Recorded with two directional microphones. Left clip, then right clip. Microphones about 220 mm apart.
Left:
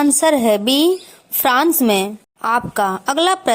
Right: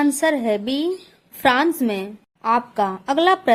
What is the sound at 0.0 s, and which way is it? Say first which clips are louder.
A woman's voice: left 5 dB; 25° left (ahead or behind).